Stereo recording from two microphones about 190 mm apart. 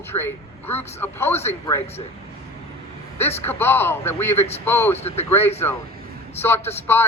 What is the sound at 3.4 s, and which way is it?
A man's voice, 10° left (ahead or behind).